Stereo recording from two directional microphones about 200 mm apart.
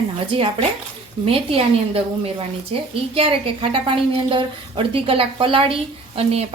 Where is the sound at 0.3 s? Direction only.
25° right (ahead or behind).